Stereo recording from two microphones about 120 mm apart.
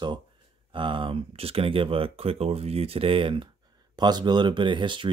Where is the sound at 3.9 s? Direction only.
35° right (ahead or behind).